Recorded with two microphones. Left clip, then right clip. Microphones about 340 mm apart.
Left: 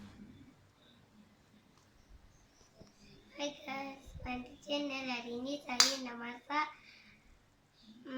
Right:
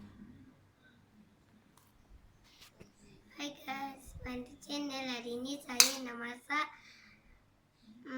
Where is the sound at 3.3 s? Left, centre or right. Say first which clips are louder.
Left 1 dB; centre.